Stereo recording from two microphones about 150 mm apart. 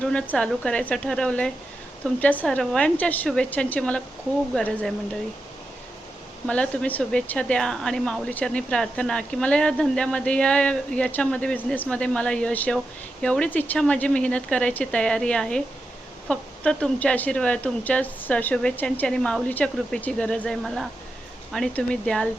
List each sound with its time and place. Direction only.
0.0 s a woman's voice: 5° left (ahead or behind)
6.5 s a woman's voice: 10° left (ahead or behind)